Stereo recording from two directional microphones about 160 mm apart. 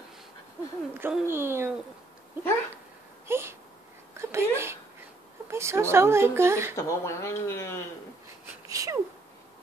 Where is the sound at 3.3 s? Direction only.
15° right (ahead or behind).